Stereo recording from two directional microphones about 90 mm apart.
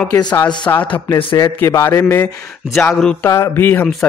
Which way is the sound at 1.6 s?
35° left (ahead or behind).